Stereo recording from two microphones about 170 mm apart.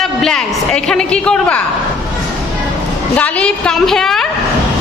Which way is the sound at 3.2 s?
5° left (ahead or behind).